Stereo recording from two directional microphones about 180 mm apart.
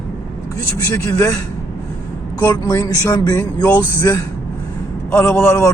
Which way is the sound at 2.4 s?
15° left (ahead or behind).